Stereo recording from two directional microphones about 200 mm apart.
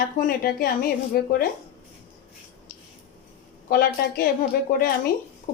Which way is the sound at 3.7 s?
50° left (ahead or behind).